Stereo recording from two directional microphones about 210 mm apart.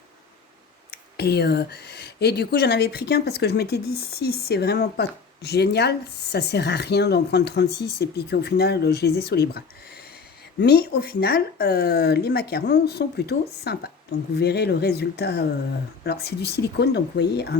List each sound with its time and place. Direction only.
0.9 s speech: 50° left (ahead or behind)